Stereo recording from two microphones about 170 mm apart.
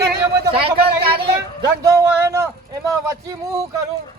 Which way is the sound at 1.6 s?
20° right (ahead or behind).